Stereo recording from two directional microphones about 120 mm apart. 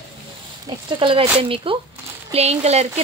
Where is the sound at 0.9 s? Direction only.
45° right (ahead or behind).